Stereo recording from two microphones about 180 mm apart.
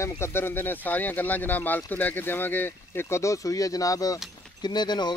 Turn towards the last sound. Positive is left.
turn(degrees=25)  # may be behind; listen again after turning